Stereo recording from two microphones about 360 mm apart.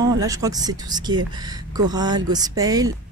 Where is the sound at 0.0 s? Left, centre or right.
Centre.